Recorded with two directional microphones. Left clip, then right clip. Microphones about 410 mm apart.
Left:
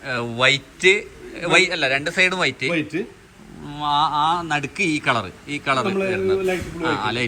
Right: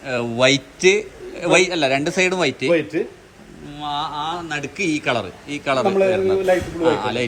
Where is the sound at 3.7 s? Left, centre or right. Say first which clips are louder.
Left 6 dB; centre.